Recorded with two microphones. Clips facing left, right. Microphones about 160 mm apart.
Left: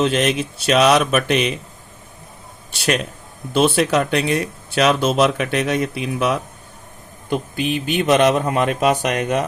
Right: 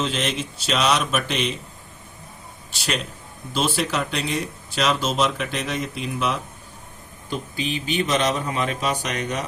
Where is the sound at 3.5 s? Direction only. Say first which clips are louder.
Left 8 dB; 60° left (ahead or behind).